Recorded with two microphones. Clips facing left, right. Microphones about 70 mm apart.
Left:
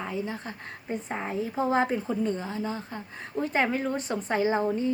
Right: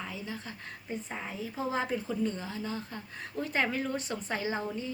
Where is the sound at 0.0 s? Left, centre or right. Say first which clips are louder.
Left 7 dB; left.